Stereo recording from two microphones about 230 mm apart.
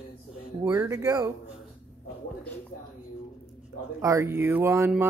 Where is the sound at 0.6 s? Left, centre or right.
Centre.